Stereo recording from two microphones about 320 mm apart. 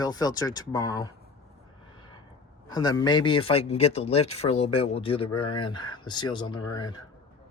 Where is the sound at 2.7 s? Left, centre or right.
Centre.